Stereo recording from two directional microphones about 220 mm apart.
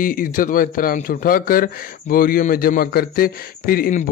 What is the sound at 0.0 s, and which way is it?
A man's voice, 40° left (ahead or behind).